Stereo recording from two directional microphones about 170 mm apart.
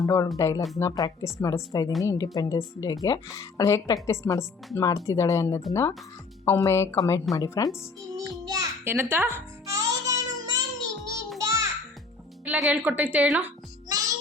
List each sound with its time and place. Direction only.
0.0 s a woman's voice: 20° left (ahead or behind)
8.1 s music: 20° right (ahead or behind)
12.5 s a woman's voice: 5° right (ahead or behind)
13.4 s music: 20° right (ahead or behind)